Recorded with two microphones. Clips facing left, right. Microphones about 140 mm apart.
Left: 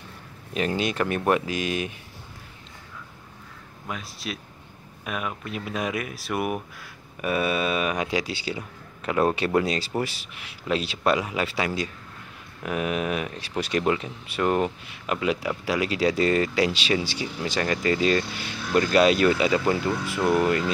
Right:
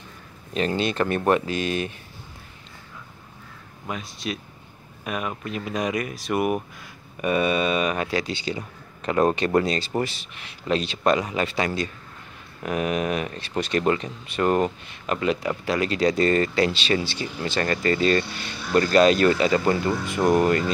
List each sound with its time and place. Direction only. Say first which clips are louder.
0.6 s speech: right 2 dB; 10° left (ahead or behind)
3.8 s speech: right 3 dB; centre (ahead or behind)